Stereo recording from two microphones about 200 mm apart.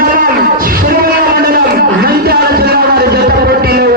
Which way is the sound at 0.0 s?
45° right (ahead or behind).